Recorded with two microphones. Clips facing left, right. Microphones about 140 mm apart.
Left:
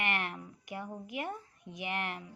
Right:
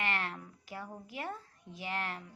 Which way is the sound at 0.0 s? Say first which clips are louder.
Left 1 dB; 20° left (ahead or behind).